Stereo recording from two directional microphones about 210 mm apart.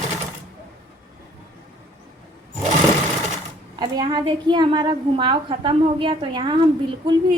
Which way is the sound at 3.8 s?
20° right (ahead or behind).